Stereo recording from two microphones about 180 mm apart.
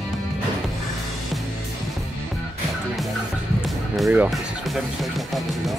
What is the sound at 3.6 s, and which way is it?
Speech, centre (ahead or behind).